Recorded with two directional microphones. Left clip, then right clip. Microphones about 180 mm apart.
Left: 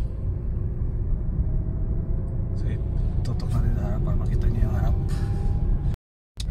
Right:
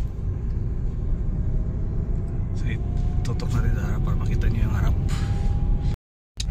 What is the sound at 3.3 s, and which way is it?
Vehicle, centre (ahead or behind).